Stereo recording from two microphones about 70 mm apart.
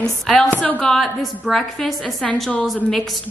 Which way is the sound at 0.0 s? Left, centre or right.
Centre.